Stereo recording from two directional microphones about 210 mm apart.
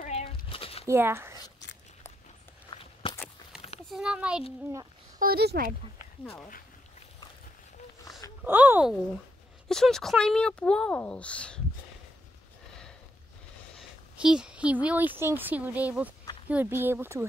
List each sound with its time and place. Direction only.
0.0 s a sound: 30° left (ahead or behind)
0.5 s crumpling: 25° left (ahead or behind)
0.8 s speech: 10° right (ahead or behind)
2.7 s walk: 25° left (ahead or behind)
3.9 s speech: 5° right (ahead or behind)
5.2 s speech: 50° right (ahead or behind)
8.5 s speech: 10° right (ahead or behind)
9.7 s speech: centre (ahead or behind)
13.7 s a sound: 5° right (ahead or behind)
15.1 s speech: 10° right (ahead or behind)